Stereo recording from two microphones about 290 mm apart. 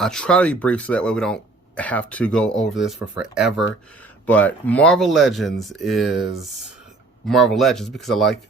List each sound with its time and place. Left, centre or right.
0.0 s speech: centre